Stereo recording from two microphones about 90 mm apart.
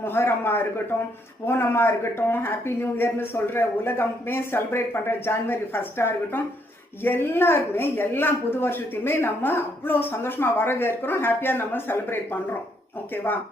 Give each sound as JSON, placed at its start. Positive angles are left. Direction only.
{"t": 0.0, "sound": "a woman's voice", "side_deg": 25}